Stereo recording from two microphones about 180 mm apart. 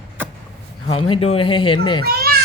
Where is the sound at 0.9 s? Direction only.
30° left (ahead or behind).